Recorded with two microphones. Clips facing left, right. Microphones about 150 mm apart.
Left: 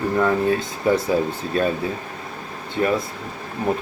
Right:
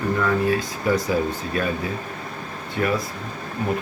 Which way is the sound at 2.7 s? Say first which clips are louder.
Left 2 dB; 25° left (ahead or behind).